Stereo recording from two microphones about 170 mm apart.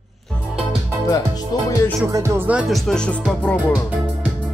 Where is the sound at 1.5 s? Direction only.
20° left (ahead or behind).